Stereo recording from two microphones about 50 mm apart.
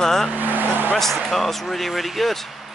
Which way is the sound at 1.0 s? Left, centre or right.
Centre.